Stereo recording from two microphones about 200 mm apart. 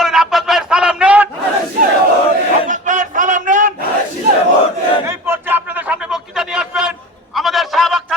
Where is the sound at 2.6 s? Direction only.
40° right (ahead or behind).